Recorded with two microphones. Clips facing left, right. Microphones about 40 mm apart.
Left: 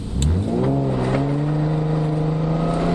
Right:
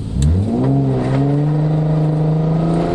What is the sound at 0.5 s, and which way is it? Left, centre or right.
Vehicle, centre.